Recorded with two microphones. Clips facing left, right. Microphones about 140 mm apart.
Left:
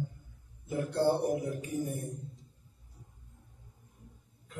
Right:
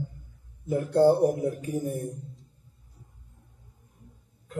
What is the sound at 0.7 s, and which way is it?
A man's voice, 50° right (ahead or behind).